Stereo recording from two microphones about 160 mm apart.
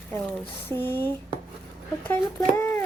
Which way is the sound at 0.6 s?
15° left (ahead or behind).